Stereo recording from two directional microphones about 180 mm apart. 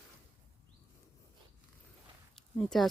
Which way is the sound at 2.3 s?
Centre (ahead or behind).